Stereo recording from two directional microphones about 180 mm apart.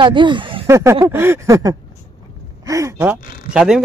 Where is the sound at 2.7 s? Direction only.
15° right (ahead or behind).